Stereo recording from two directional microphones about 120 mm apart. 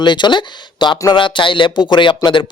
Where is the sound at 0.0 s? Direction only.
40° left (ahead or behind).